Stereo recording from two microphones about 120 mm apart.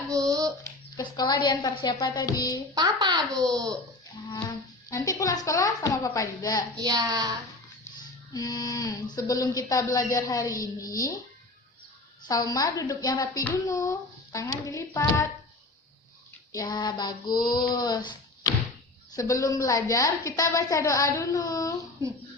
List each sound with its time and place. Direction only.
0.1 s a sound: 30° right (ahead or behind)
0.6 s a woman's voice: 30° left (ahead or behind)
2.7 s speech: 35° right (ahead or behind)
4.4 s speech: 30° left (ahead or behind)
6.7 s speech: 35° right (ahead or behind)
8.3 s speech: 30° left (ahead or behind)
12.3 s a woman's voice: 30° left (ahead or behind)
16.6 s a woman's voice: 35° left (ahead or behind)